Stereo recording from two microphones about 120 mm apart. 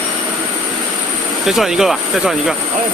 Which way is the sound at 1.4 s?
Centre (ahead or behind).